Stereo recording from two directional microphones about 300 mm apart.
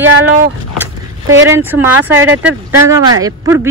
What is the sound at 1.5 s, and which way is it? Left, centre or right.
Speech, centre.